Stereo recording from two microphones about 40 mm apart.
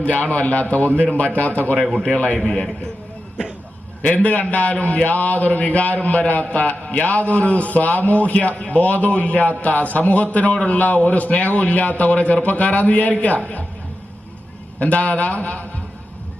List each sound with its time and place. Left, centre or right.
0.0 s a man's voice: left
2.0 s a man's voice: left
4.0 s a man's voice: left
14.8 s a man's voice: left